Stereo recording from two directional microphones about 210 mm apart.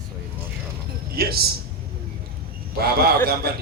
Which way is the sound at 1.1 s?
45° right (ahead or behind).